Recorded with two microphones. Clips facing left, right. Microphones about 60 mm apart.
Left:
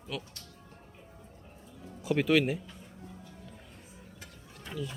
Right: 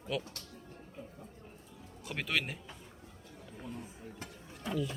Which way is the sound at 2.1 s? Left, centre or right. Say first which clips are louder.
Left 10 dB; centre.